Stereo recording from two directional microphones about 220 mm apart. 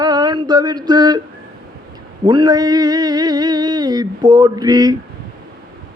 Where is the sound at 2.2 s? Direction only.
20° right (ahead or behind).